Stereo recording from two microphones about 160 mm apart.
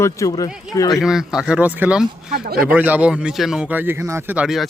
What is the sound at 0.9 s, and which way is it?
Speech, centre (ahead or behind).